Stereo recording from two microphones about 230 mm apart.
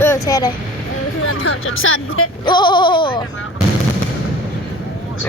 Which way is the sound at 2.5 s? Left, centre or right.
Centre.